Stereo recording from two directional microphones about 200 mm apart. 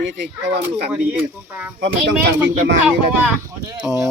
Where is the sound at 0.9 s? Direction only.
5° right (ahead or behind).